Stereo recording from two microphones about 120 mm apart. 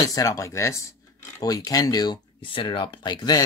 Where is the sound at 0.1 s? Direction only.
25° left (ahead or behind).